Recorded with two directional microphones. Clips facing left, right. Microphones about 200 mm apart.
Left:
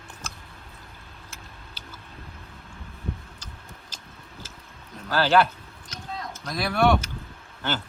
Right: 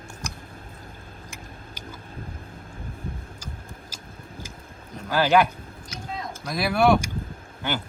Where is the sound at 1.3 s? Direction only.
15° right (ahead or behind).